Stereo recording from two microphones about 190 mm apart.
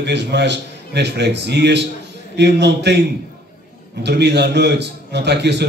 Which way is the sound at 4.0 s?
60° right (ahead or behind).